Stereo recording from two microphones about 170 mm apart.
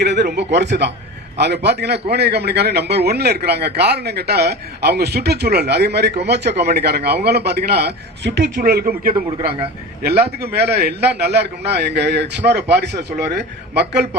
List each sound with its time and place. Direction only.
0.0 s speech: 85° right
1.4 s a man's voice: 75° right (ahead or behind)
8.5 s a man's voice: 60° right (ahead or behind); by 14.2 s 80° right